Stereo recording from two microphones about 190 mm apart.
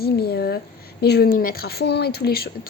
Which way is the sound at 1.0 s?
55° left (ahead or behind).